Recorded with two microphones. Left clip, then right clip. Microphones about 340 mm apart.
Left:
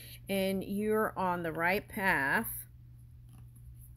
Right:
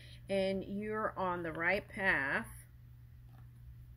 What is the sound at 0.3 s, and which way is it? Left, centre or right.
Speech, left.